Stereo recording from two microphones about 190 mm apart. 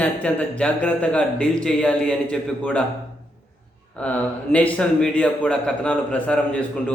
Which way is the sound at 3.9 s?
5° left (ahead or behind).